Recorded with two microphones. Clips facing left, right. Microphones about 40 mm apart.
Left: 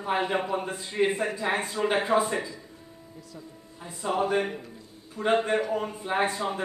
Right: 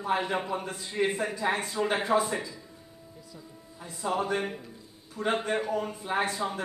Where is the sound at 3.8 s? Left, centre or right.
Centre.